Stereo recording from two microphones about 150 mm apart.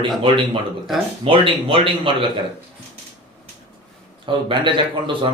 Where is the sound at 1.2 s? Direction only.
35° right (ahead or behind).